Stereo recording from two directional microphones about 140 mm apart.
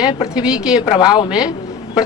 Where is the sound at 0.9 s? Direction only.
30° left (ahead or behind).